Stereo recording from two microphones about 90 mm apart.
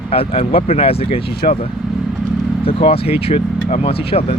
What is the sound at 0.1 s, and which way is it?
Speech, 90° left.